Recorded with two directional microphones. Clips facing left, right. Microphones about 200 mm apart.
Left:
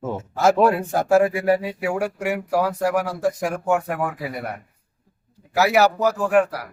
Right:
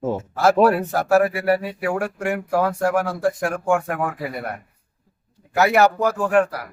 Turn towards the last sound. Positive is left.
turn(degrees=5)  # may be behind; listen again after turning